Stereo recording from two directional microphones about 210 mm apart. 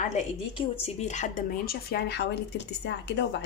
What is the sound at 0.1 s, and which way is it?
Speech, 25° left (ahead or behind).